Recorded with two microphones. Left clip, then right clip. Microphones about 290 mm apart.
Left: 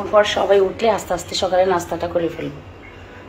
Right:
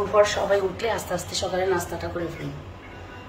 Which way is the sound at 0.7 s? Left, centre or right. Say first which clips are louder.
Left 8 dB; centre.